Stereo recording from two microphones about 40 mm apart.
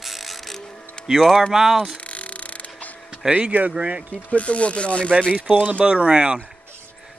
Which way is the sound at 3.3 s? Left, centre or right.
Right.